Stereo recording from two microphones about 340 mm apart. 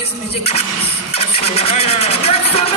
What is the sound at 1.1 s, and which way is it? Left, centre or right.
Speech, centre.